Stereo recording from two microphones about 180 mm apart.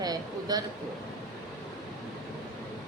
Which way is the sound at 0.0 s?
20° right (ahead or behind).